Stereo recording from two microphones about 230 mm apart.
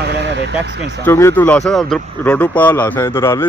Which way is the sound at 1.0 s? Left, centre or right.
Centre.